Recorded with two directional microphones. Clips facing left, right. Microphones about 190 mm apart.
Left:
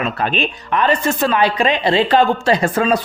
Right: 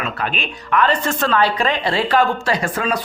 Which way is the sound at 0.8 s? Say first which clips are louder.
Left 7 dB; 10° left (ahead or behind).